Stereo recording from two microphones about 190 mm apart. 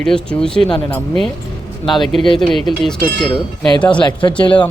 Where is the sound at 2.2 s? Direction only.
25° left (ahead or behind).